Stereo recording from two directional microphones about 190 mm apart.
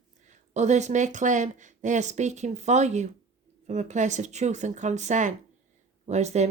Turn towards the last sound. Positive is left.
turn(degrees=-35)  # may be behind; listen again after turning